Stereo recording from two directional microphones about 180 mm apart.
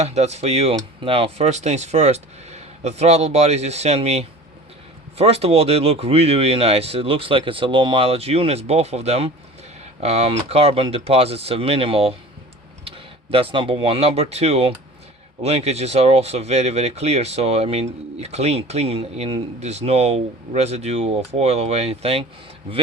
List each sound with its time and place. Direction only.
0.0 s speech: 35° right (ahead or behind)
13.3 s speech: 30° right (ahead or behind)